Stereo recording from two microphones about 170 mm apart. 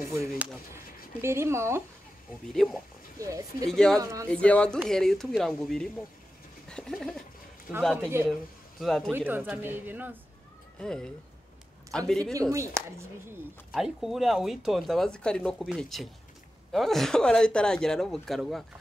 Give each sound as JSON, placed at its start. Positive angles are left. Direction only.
{"t": 0.3, "sound": "speech", "side_deg": 0}
{"t": 1.2, "sound": "a woman's voice", "side_deg": -15}
{"t": 2.5, "sound": "speech", "side_deg": 0}
{"t": 3.2, "sound": "speech", "side_deg": -20}
{"t": 3.6, "sound": "speech", "side_deg": 5}
{"t": 4.0, "sound": "speech", "side_deg": -20}
{"t": 4.3, "sound": "speech", "side_deg": 5}
{"t": 6.7, "sound": "bird", "side_deg": 0}
{"t": 7.8, "sound": "speech", "side_deg": 0}
{"t": 9.1, "sound": "a woman's voice", "side_deg": -10}
{"t": 10.8, "sound": "speech", "side_deg": 5}
{"t": 12.1, "sound": "speech", "side_deg": 5}
{"t": 12.4, "sound": "a woman's voice", "side_deg": -20}
{"t": 13.7, "sound": "speech", "side_deg": 0}